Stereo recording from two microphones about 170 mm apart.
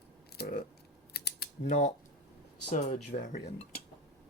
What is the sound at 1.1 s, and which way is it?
Typing, 65° left (ahead or behind).